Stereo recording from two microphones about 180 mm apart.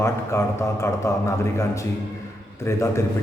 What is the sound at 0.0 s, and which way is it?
A man's voice, 15° left (ahead or behind).